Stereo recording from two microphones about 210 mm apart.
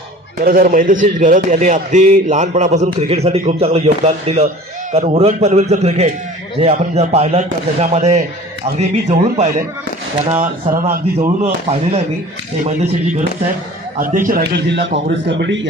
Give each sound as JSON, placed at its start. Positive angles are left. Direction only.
{"t": 0.4, "sound": "a man's voice", "side_deg": -40}
{"t": 11.2, "sound": "a man's voice", "side_deg": -30}
{"t": 14.7, "sound": "speech", "side_deg": -55}